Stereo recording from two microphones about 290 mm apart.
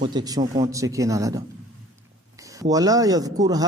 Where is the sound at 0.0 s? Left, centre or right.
Centre.